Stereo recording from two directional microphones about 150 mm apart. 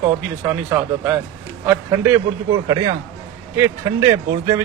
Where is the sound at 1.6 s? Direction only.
15° right (ahead or behind).